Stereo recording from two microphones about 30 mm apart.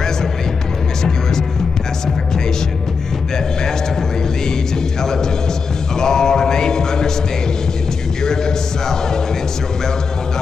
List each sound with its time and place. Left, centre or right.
5.9 s music: left
8.2 s music: centre